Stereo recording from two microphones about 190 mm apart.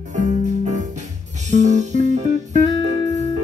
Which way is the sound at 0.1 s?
40° right (ahead or behind).